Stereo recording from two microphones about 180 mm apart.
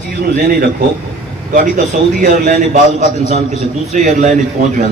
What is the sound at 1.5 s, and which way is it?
A man's voice, 50° right (ahead or behind).